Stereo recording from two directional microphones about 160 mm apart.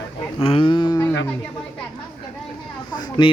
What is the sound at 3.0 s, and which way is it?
Speech, 30° left (ahead or behind).